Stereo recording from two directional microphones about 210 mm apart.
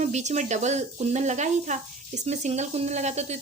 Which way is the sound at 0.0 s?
35° right (ahead or behind).